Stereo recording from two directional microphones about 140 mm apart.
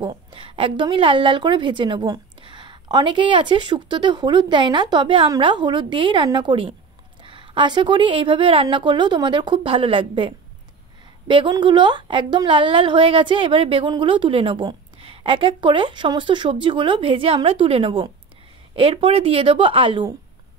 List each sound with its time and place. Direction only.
0.0 s a woman's voice: 35° right (ahead or behind)